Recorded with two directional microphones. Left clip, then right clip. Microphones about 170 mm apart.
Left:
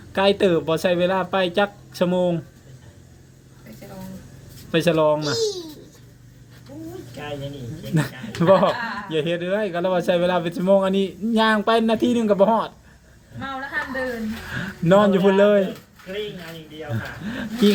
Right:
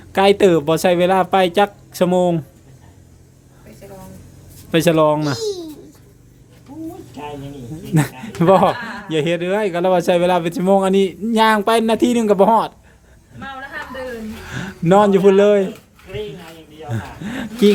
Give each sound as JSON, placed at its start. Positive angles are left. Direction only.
{"t": 0.1, "sound": "speech", "side_deg": -20}
{"t": 4.7, "sound": "speech", "side_deg": -20}
{"t": 5.4, "sound": "babbling", "side_deg": -65}
{"t": 7.9, "sound": "speech", "side_deg": -20}
{"t": 14.4, "sound": "speech", "side_deg": -15}
{"t": 16.9, "sound": "speech", "side_deg": -15}